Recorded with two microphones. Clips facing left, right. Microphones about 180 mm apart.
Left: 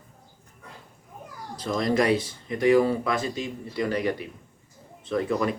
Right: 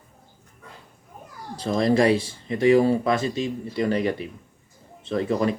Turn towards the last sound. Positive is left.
turn(degrees=-30)  # may be behind; listen again after turning